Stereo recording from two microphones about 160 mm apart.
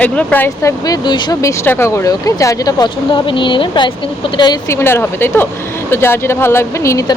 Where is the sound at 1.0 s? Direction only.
25° left (ahead or behind).